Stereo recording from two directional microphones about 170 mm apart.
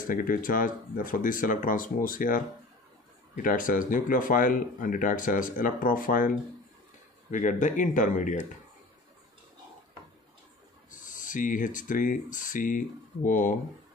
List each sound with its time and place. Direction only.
0.0 s speech: 55° left (ahead or behind)
3.4 s speech: 55° left (ahead or behind)
10.9 s speech: 50° left (ahead or behind)